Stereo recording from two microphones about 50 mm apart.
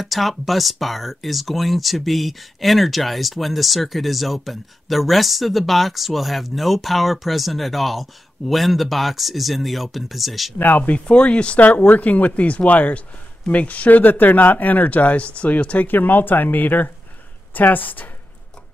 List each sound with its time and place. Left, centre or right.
0.0 s speech: centre
10.8 s speech: left